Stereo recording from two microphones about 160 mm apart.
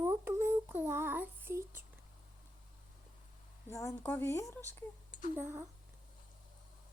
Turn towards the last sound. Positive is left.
turn(degrees=-15)  # may be behind; listen again after turning